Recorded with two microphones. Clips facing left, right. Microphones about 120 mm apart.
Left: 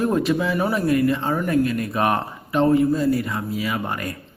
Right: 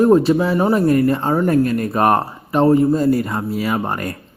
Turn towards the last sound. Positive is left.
turn(degrees=-40)  # may be behind; listen again after turning